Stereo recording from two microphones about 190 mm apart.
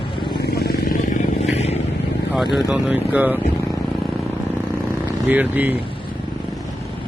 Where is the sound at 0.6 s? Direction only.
50° left (ahead or behind).